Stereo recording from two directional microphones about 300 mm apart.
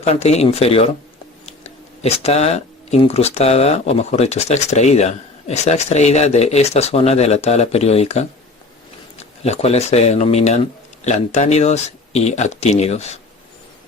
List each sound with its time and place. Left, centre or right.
0.0 s speech: left
2.0 s speech: left